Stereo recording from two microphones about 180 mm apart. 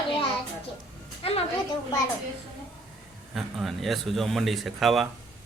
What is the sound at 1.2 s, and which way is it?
Speech, 35° left (ahead or behind).